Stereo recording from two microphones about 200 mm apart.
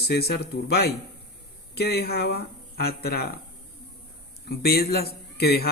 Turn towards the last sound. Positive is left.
turn(degrees=50)  # may be behind; listen again after turning